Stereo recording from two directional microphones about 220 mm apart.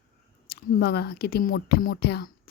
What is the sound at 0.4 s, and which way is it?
Speech, 45° left (ahead or behind).